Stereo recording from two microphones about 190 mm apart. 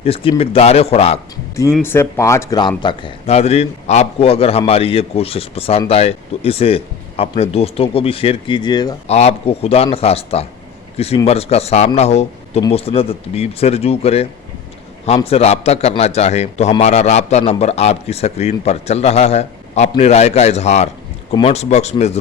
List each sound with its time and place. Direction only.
0.0 s a man's voice: 30° left (ahead or behind)
1.8 s a man's voice: 10° left (ahead or behind)
9.0 s a man's voice: 35° left (ahead or behind)